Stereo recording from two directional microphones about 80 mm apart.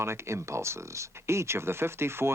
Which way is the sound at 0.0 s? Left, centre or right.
Right.